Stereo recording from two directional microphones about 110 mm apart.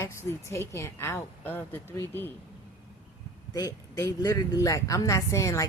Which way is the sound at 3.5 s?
30° left (ahead or behind).